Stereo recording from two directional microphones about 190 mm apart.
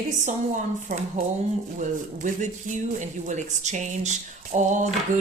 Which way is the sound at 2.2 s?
40° right (ahead or behind).